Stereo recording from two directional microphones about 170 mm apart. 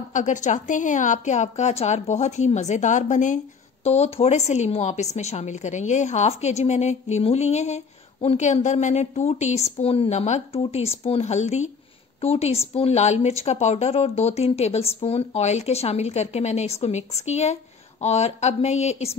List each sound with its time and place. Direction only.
0.1 s a woman's voice: 45° left (ahead or behind)